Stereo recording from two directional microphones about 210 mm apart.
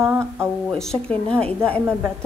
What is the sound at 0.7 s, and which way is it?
Speech, centre (ahead or behind).